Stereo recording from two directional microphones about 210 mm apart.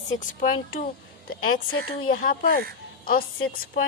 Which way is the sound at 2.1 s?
45° left (ahead or behind).